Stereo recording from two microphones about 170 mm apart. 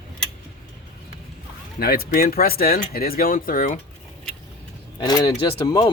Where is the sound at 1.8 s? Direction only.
60° left (ahead or behind).